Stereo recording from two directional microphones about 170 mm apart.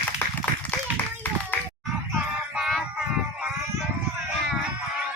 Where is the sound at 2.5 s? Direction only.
Centre (ahead or behind).